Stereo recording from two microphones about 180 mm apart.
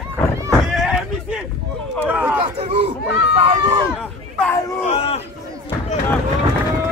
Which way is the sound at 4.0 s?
5° left (ahead or behind).